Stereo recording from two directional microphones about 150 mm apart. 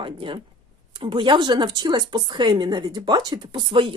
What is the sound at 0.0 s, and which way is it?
Speech, 35° right (ahead or behind).